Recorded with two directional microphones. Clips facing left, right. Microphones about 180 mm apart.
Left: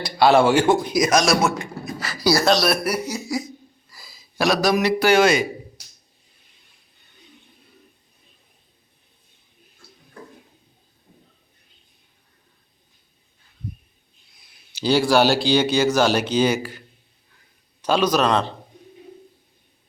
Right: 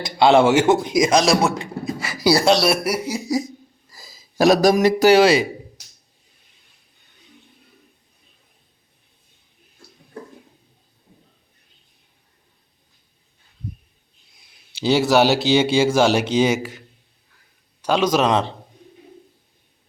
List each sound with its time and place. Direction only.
0.0 s speech: 20° right (ahead or behind)
2.6 s a man's voice: 5° right (ahead or behind)
3.2 s speech: 20° right (ahead or behind)
3.8 s a man's voice: 45° right (ahead or behind)
14.8 s speech: 25° right (ahead or behind)
17.8 s speech: 20° right (ahead or behind)
18.2 s a man's voice: 10° right (ahead or behind)